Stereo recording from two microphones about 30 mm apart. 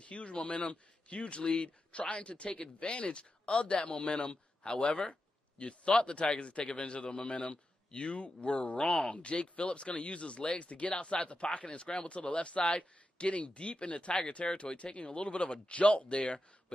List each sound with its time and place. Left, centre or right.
0.0 s speech: left
13.3 s speech: left